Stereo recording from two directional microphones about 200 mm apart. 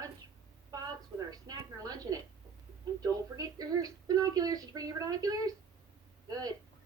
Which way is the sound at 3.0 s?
20° right (ahead or behind).